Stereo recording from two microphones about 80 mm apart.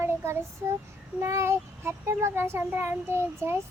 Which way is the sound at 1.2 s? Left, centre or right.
Right.